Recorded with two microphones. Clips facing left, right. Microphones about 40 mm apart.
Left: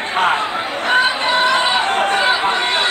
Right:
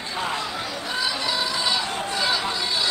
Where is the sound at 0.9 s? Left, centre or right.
Left.